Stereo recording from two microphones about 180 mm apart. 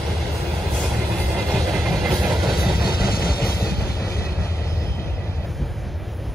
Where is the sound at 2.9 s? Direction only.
60° left (ahead or behind).